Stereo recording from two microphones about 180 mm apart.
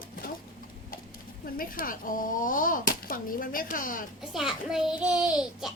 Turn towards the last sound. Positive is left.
turn(degrees=-5)  # may be behind; listen again after turning